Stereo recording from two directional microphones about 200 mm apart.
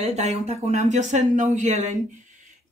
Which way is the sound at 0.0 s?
35° right (ahead or behind).